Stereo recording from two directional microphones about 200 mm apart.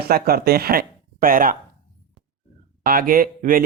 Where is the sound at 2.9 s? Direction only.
45° right (ahead or behind).